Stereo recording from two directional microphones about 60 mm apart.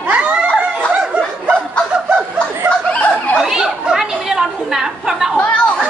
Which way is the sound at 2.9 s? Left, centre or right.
Left.